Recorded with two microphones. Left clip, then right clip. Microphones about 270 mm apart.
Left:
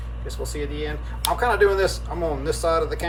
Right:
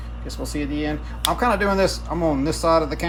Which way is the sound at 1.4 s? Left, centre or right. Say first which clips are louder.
Left 1 dB; right.